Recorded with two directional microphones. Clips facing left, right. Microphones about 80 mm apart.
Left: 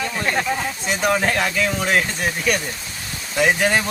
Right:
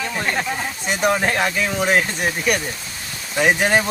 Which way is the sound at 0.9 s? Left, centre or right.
Centre.